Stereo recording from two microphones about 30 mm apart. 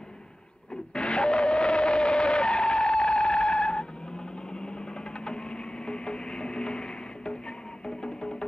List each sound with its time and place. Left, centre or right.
0.9 s vehicle: left
5.2 s a sound: left
7.8 s music: left